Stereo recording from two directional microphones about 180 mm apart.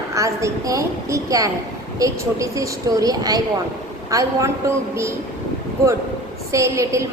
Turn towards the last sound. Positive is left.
turn(degrees=-15)  # may be behind; listen again after turning